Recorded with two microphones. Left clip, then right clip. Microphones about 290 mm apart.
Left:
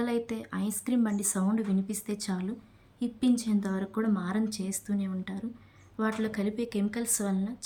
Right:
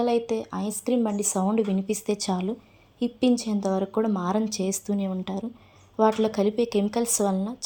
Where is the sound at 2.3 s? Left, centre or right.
Right.